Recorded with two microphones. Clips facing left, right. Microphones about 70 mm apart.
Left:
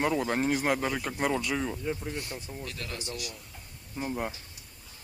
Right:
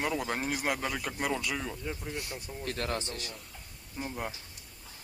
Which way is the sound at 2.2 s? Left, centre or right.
Centre.